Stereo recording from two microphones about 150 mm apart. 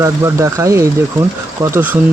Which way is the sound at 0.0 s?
20° right (ahead or behind).